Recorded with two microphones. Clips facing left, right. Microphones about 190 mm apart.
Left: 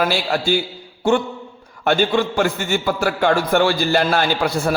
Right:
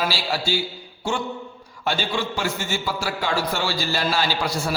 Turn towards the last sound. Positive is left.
turn(degrees=55)  # may be behind; listen again after turning